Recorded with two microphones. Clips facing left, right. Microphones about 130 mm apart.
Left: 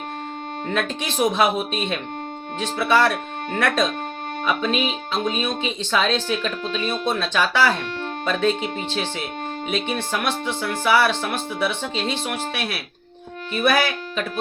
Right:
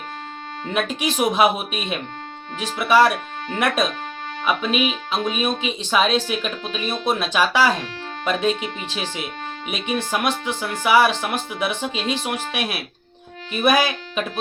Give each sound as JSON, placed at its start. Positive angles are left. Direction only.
{"t": 0.7, "sound": "speech", "side_deg": -15}
{"t": 4.4, "sound": "speech", "side_deg": -15}